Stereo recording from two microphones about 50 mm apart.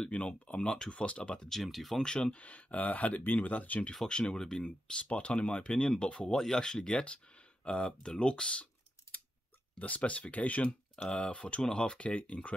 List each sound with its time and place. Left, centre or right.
0.0 s speech: left
1.5 s speech: centre
2.0 s speech: centre
4.1 s speech: centre
9.8 s speech: left
11.0 s speech: centre